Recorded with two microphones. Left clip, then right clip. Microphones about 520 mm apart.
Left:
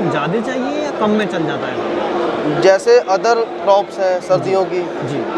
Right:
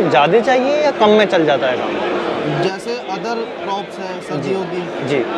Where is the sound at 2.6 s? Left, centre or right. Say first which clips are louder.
Left 10 dB; left.